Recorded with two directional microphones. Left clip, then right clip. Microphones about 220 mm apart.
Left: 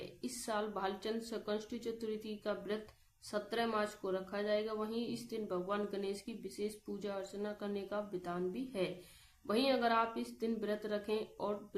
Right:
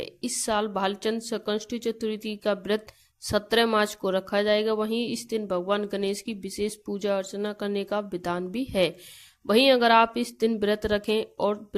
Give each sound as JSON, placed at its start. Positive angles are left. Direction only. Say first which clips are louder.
{"t": 0.0, "sound": "a woman's voice", "louder": "right 13 dB", "side_deg": -45}